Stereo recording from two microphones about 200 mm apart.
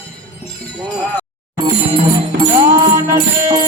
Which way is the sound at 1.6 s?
25° right (ahead or behind).